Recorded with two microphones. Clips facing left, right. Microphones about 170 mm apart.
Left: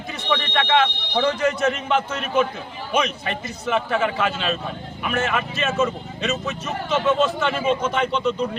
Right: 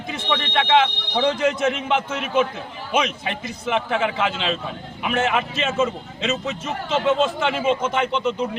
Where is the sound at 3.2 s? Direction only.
20° right (ahead or behind).